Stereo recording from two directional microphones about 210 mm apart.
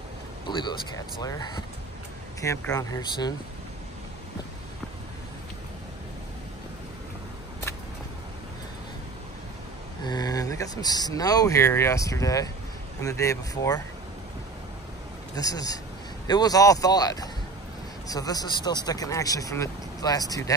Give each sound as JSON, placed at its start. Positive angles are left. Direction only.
{"t": 0.5, "sound": "a sound", "side_deg": 20}
{"t": 2.4, "sound": "speech", "side_deg": 15}
{"t": 10.0, "sound": "speech", "side_deg": 20}
{"t": 15.3, "sound": "speech", "side_deg": 15}